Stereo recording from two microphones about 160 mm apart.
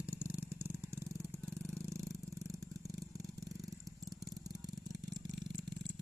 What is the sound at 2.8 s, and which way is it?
Vehicle, 20° right (ahead or behind).